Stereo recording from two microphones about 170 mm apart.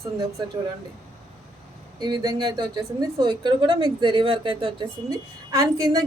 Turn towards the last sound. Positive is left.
turn(degrees=-20)  # may be behind; listen again after turning